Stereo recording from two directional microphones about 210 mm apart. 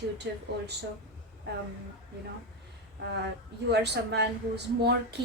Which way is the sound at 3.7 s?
55° right (ahead or behind).